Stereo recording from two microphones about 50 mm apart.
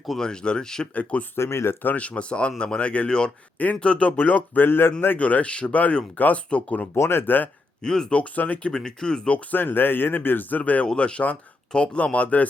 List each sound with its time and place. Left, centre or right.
0.2 s speech: centre
1.4 s speech: left
2.0 s speech: left
4.2 s speech: left
5.2 s speech: left
6.9 s speech: left
7.8 s speech: centre
8.2 s speech: left
8.7 s speech: centre
9.5 s speech: left
10.6 s speech: left